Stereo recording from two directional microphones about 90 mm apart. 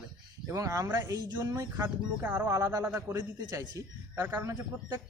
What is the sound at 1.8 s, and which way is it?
Speech, 25° right (ahead or behind).